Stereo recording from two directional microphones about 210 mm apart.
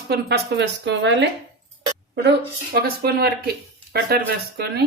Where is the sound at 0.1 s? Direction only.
50° right (ahead or behind).